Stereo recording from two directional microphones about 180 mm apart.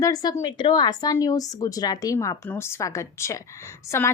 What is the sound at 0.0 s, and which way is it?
A woman's voice, 20° left (ahead or behind).